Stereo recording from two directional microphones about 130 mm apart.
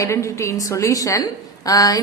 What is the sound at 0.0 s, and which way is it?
Speech, 25° left (ahead or behind).